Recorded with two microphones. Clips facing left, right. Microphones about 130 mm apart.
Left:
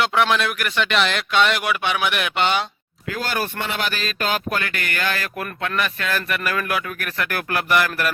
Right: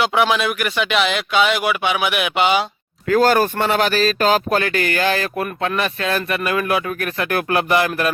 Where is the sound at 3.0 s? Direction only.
45° right (ahead or behind).